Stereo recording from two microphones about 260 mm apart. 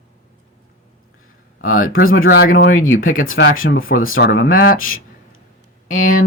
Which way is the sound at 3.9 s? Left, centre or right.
Left.